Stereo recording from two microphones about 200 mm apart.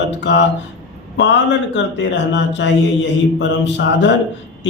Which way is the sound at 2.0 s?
60° left (ahead or behind).